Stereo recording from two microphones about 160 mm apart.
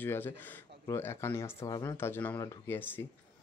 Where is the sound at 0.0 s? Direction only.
10° left (ahead or behind).